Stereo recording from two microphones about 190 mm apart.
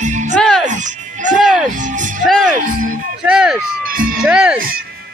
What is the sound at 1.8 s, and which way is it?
Music, 40° right (ahead or behind).